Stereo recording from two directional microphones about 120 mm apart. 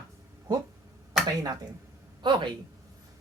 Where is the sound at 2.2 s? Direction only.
40° right (ahead or behind).